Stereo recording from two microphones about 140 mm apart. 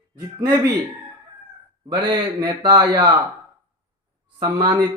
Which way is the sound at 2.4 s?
30° right (ahead or behind).